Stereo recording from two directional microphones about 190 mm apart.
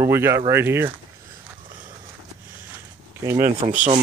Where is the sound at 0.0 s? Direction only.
15° right (ahead or behind).